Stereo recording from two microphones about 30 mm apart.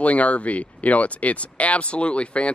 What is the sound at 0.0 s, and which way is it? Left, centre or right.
Speech, left.